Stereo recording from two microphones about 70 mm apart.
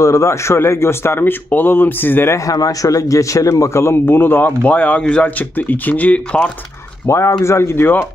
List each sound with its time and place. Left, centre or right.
0.0 s a man's voice: left
2.5 s a man's voice: left; by 6.5 s centre
7.1 s a man's voice: left